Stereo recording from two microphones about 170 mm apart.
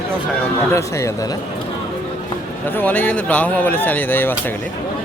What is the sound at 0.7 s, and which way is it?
Speech, 15° left (ahead or behind).